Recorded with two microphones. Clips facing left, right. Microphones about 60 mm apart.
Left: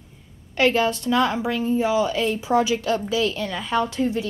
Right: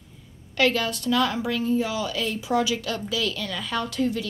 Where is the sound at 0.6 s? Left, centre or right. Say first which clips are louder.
Left 3 dB; left.